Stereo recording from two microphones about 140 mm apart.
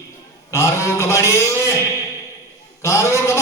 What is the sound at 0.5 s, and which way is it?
A man's voice, 20° left (ahead or behind).